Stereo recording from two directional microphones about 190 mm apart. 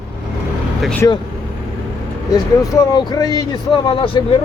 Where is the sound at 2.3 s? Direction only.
20° left (ahead or behind).